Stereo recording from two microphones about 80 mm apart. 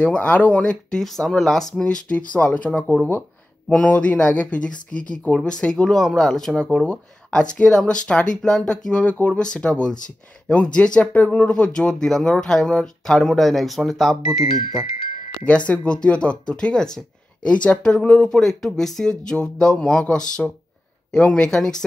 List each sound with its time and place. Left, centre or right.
0.0 s speech: centre
15.4 s speech: centre